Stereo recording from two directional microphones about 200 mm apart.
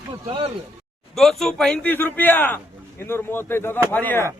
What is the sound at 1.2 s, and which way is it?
A man's voice, centre (ahead or behind).